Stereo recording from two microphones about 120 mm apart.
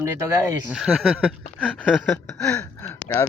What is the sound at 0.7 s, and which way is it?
Speech, 5° right (ahead or behind).